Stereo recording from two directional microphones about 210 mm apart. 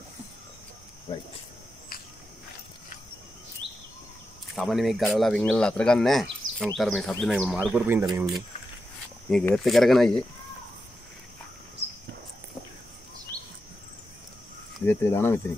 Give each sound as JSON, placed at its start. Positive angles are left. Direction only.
{"t": 1.1, "sound": "speech", "side_deg": 20}
{"t": 4.6, "sound": "speech", "side_deg": 0}
{"t": 6.4, "sound": "a sound", "side_deg": -70}
{"t": 6.8, "sound": "speech", "side_deg": 0}
{"t": 9.3, "sound": "speech", "side_deg": 5}
{"t": 14.9, "sound": "speech", "side_deg": 10}